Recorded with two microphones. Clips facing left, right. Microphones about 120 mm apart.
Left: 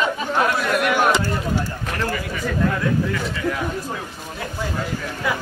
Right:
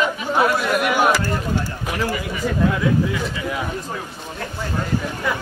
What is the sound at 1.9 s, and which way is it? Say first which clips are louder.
Speech: right 2 dB; 10° right (ahead or behind).